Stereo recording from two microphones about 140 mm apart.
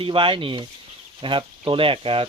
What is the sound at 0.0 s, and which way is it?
Speech, 40° right (ahead or behind).